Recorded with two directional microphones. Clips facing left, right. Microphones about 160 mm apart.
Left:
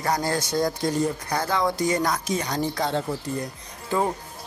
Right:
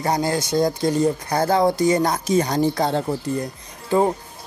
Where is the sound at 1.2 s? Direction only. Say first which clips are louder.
Right 6 dB; 35° right (ahead or behind).